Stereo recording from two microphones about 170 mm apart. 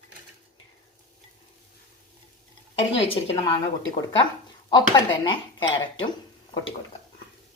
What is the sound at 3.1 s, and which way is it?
Speech, 35° left (ahead or behind).